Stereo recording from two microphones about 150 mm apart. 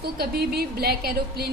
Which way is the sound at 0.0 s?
90° right.